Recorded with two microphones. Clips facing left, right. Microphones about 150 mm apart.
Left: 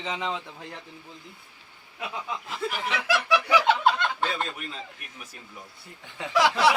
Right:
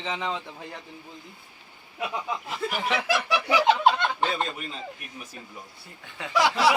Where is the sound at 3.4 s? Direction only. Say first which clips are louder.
Right 3 dB; 25° right (ahead or behind).